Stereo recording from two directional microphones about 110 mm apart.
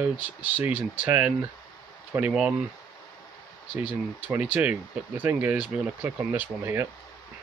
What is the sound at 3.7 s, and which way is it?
Speech, 20° right (ahead or behind).